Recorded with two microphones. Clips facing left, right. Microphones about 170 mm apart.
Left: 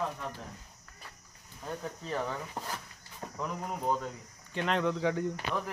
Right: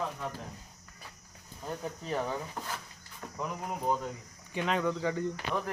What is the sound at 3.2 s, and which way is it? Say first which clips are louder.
Cricket: left 2 dB; 35° left (ahead or behind).